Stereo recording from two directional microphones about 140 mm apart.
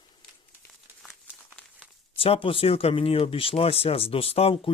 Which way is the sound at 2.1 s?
40° left (ahead or behind).